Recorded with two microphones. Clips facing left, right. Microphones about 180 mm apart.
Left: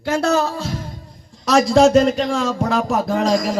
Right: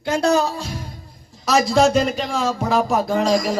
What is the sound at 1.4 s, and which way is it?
Speech, centre (ahead or behind).